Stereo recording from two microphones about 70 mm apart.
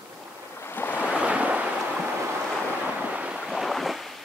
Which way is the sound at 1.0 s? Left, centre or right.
Centre.